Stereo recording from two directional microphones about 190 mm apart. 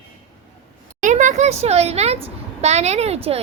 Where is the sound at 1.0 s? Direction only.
40° right (ahead or behind).